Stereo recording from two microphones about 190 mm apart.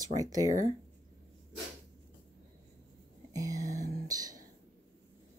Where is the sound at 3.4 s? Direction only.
20° right (ahead or behind).